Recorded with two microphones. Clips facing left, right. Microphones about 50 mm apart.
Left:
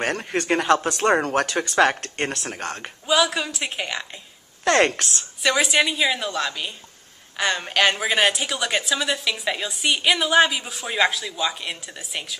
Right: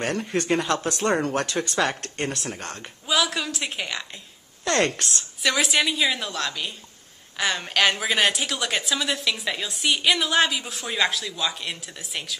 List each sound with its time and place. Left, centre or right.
0.0 s speech: left
1.8 s speech: left
3.1 s a woman's voice: centre
5.4 s a woman's voice: centre